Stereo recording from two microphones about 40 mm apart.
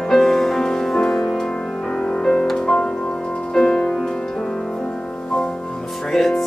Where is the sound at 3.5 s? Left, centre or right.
Centre.